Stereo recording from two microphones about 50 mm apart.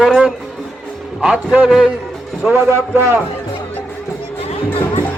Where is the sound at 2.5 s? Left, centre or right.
Right.